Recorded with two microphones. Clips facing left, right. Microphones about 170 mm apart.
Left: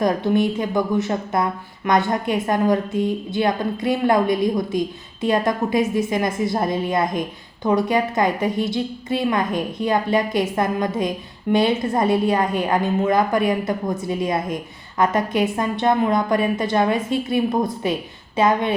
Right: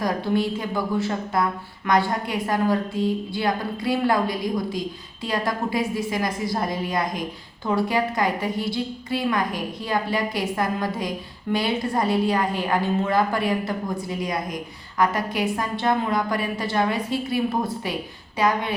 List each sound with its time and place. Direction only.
0.0 s a woman's voice: 20° left (ahead or behind)